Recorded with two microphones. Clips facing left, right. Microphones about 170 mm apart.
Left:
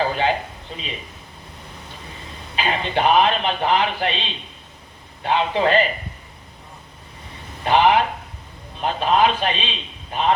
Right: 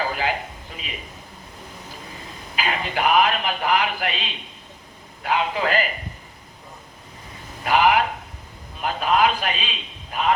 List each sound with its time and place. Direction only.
0.0 s a sound: 30° left (ahead or behind)
0.7 s a man's voice: 30° left (ahead or behind)
2.6 s a man's voice: 30° left (ahead or behind)
7.6 s a man's voice: 30° left (ahead or behind)